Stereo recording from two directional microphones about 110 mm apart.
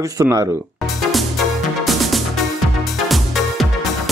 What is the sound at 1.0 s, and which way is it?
Music, centre (ahead or behind).